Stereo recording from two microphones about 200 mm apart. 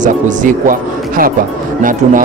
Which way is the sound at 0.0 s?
40° right (ahead or behind).